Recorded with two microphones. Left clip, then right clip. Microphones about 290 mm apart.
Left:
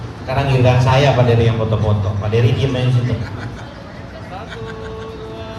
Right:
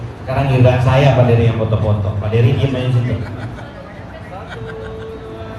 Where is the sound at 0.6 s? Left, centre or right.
Left.